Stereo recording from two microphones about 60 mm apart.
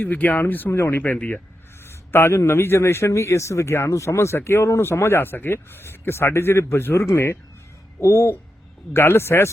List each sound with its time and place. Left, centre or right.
0.0 s speech: left
0.7 s speech: left
1.1 s speech: left
1.8 s a sound: left
2.4 s speech: left
8.9 s speech: left